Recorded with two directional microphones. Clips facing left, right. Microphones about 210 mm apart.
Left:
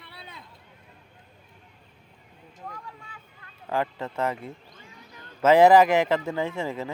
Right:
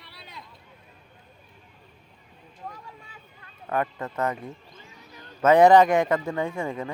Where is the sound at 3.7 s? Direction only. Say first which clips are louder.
Even; 25° left (ahead or behind).